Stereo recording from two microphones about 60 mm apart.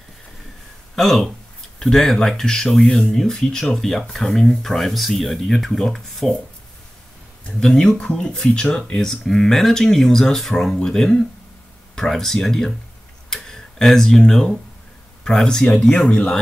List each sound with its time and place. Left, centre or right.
0.9 s speech: centre
7.6 s speech: centre